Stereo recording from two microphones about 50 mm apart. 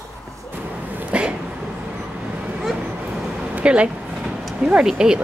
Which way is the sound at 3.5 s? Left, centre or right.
Right.